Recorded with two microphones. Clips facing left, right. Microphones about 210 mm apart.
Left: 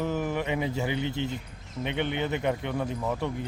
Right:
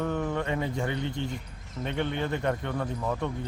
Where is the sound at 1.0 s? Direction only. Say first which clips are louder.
Left 2 dB; 25° left (ahead or behind).